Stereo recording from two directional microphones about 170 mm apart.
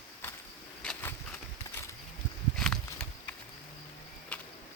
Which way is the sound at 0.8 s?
5° left (ahead or behind).